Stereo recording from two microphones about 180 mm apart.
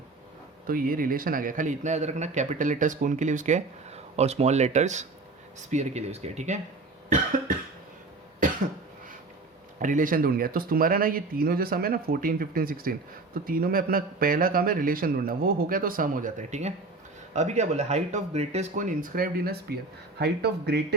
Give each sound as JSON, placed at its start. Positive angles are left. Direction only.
{"t": 0.7, "sound": "speech", "side_deg": -50}
{"t": 9.8, "sound": "speech", "side_deg": -45}